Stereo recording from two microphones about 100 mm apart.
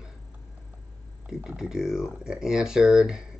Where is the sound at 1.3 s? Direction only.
10° right (ahead or behind).